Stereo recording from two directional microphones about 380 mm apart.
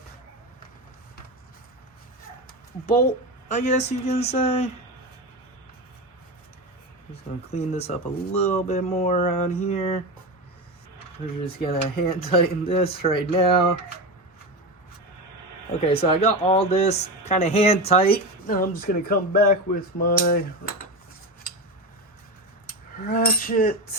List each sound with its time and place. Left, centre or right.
3.5 s speech: centre
7.5 s speech: centre
11.4 s speech: centre
15.9 s speech: centre
22.6 s speech: left